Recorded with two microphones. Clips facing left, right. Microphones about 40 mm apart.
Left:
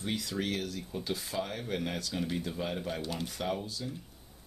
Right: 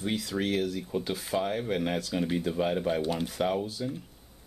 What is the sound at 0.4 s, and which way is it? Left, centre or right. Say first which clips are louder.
Speech: right 5 dB; right.